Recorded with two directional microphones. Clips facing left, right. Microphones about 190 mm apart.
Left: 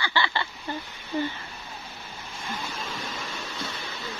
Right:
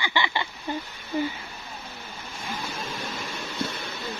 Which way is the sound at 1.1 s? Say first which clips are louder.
Right 1 dB; 10° right (ahead or behind).